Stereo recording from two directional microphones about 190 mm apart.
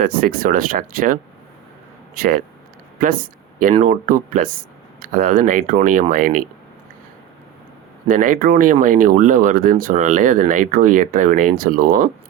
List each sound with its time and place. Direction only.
0.0 s speech: 50° right (ahead or behind)
8.0 s speech: 45° right (ahead or behind)